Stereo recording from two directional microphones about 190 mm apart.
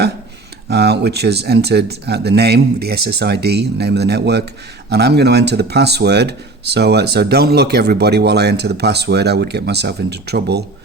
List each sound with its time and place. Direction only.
0.7 s speech: 60° right (ahead or behind)